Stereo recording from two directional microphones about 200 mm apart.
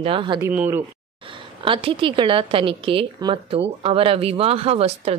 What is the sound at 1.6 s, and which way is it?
A woman's voice, 25° right (ahead or behind).